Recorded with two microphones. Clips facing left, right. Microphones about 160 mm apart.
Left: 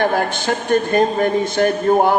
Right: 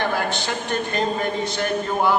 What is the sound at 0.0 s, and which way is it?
A man's voice, 45° left (ahead or behind).